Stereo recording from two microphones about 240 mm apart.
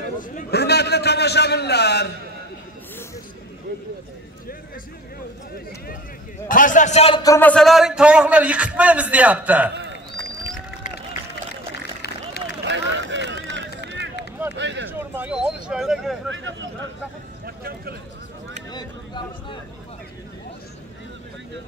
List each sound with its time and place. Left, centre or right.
0.2 s a man's voice: left
6.5 s a man's voice: left
7.2 s a man's voice: centre
12.6 s run: right
14.6 s a sound: right
14.9 s speech: centre
16.3 s speech: right
18.7 s a sound: centre